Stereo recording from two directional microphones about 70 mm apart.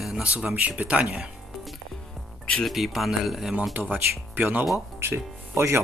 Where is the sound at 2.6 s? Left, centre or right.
Centre.